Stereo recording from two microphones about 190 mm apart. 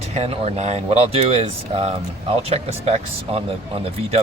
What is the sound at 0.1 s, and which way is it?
Speech, 30° right (ahead or behind).